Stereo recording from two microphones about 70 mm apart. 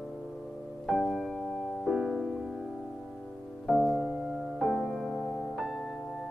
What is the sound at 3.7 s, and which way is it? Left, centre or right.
Music, centre.